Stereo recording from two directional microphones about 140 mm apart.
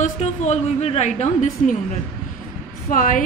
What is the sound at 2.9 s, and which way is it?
Speech, 70° left (ahead or behind).